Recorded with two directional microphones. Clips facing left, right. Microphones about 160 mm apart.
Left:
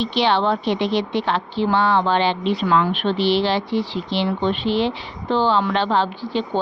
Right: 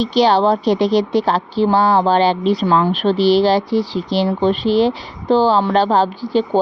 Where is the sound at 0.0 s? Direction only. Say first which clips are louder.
Right 5 dB; 40° right (ahead or behind).